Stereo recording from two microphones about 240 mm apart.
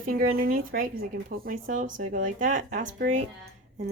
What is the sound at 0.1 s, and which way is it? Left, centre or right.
Speech, right.